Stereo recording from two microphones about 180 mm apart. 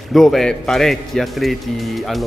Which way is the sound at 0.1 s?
Centre (ahead or behind).